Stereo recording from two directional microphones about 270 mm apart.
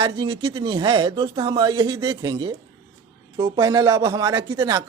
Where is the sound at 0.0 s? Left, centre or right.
Centre.